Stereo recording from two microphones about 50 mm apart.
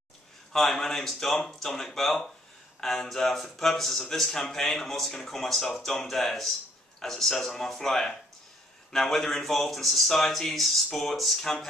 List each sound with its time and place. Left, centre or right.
0.5 s speech: centre